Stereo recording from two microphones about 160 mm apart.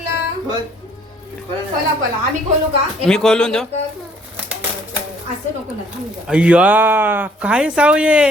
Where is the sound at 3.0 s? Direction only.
5° left (ahead or behind).